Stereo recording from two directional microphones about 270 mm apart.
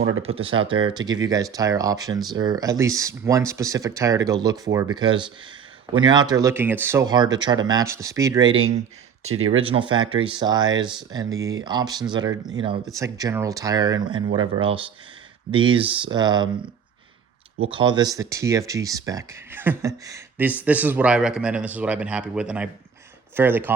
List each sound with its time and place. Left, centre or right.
0.2 s speech: right
8.4 s speech: right
9.6 s speech: centre
17.7 s a man's voice: centre